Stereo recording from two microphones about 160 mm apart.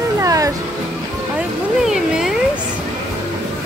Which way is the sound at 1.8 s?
Centre (ahead or behind).